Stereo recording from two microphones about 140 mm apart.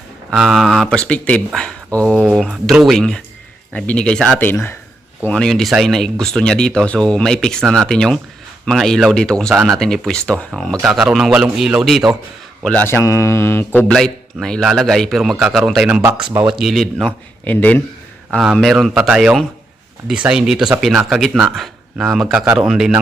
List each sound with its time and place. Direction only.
0.3 s speech: 5° right (ahead or behind); by 4.8 s 15° left (ahead or behind)
5.3 s speech: 5° left (ahead or behind)
12.6 s speech: 10° left (ahead or behind)
13.1 s mantra: 20° left (ahead or behind)
13.9 s speech: 5° left (ahead or behind)
18.3 s speech: centre (ahead or behind)